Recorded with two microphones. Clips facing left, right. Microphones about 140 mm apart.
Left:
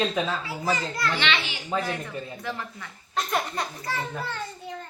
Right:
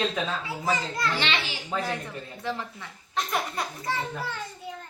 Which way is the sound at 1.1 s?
35° right (ahead or behind).